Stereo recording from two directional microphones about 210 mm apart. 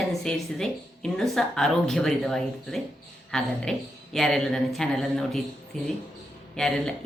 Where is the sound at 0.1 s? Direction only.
Centre (ahead or behind).